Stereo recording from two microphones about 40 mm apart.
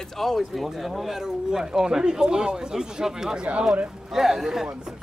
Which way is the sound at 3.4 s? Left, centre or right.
Right.